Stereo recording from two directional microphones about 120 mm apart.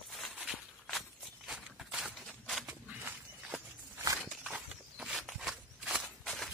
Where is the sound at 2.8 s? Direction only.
15° right (ahead or behind).